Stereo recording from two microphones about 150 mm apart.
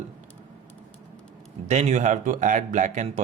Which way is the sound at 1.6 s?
50° right (ahead or behind).